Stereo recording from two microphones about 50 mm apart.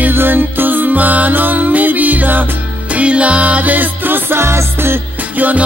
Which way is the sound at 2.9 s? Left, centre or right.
Right.